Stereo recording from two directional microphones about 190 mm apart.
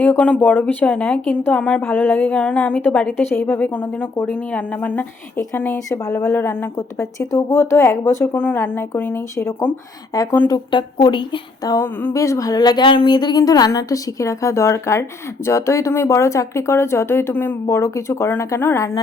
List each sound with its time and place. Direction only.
0.0 s speech: 5° left (ahead or behind)